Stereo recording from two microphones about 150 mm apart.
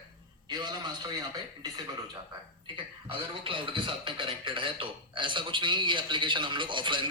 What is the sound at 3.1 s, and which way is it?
A man's voice, 35° right (ahead or behind).